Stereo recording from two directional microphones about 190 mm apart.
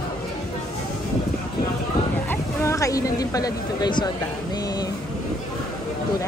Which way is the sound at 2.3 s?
15° left (ahead or behind).